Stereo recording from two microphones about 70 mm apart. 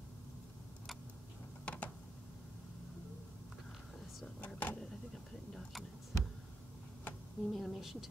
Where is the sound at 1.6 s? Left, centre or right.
Left.